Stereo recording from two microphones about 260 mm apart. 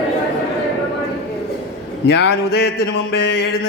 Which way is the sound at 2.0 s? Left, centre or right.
Left.